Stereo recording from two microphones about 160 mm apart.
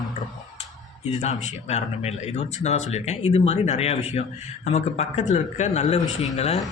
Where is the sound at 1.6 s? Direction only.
40° left (ahead or behind).